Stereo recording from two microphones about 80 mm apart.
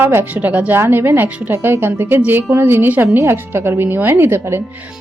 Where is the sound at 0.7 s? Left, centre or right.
Right.